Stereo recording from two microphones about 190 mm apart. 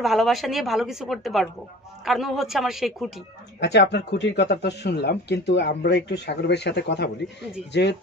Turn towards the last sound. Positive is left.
turn(degrees=65)  # may be behind; listen again after turning